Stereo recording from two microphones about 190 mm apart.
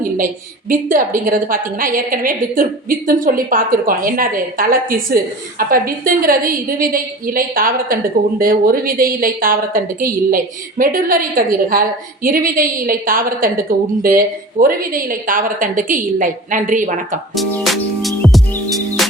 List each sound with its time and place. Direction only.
0.7 s a woman's voice: 45° right (ahead or behind)
17.7 s music: centre (ahead or behind)